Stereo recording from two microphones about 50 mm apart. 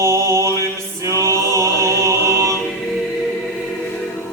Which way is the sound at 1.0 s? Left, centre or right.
Right.